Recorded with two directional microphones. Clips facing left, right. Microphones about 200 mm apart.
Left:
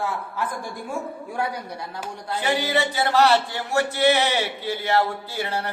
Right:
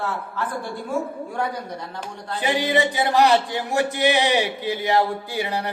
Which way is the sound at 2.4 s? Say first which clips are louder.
Right 2 dB; 15° right (ahead or behind).